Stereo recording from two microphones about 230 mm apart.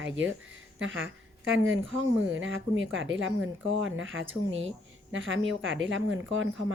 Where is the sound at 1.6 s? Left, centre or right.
Right.